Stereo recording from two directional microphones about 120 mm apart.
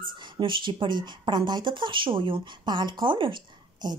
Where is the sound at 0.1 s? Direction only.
40° right (ahead or behind).